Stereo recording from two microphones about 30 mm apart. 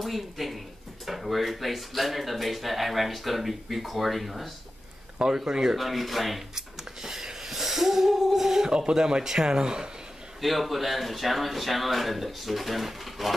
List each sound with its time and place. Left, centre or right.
0.0 s a sound: centre
1.0 s speech: centre
5.2 s speech: centre
5.8 s speech: centre
6.5 s a sound: centre
8.7 s speech: right
10.4 s speech: centre